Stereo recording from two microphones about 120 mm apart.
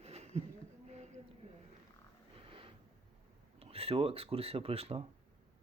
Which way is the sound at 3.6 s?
55° right (ahead or behind).